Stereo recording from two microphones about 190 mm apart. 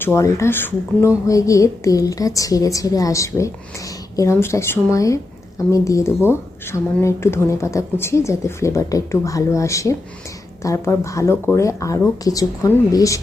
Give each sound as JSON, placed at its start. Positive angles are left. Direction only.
{"t": 0.0, "sound": "a woman's voice", "side_deg": 15}